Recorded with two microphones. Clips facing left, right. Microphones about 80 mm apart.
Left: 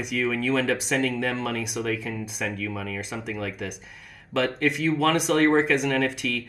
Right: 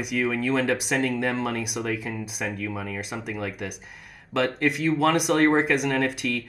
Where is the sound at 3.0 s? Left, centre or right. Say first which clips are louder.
Even; centre.